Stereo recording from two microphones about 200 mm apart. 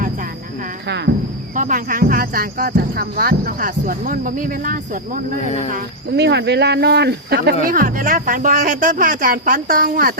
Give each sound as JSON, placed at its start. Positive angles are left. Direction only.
{"t": 0.9, "sound": "speech", "side_deg": -55}
{"t": 1.5, "sound": "speech", "side_deg": -40}
{"t": 5.7, "sound": "speech", "side_deg": -55}